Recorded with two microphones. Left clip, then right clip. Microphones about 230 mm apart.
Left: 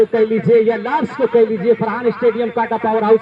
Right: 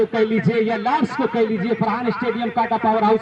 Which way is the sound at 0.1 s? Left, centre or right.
Right.